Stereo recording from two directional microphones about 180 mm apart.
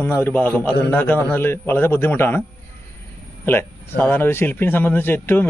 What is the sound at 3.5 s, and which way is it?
A man's voice, 10° left (ahead or behind).